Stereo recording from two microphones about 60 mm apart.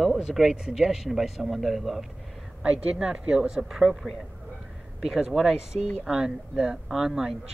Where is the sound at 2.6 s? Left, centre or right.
Centre.